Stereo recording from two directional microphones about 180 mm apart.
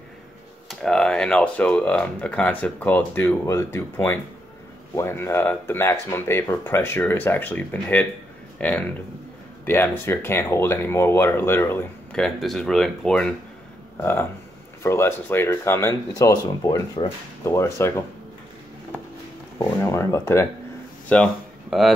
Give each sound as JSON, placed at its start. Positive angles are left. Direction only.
{"t": 0.7, "sound": "speech", "side_deg": 5}
{"t": 19.6, "sound": "speech", "side_deg": 15}
{"t": 21.1, "sound": "a sound", "side_deg": 5}